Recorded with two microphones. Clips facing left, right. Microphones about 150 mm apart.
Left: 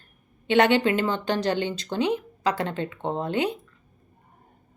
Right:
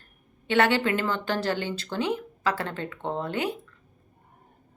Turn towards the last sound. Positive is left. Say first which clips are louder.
# left 3 dB
turn(degrees=20)  # may be behind; listen again after turning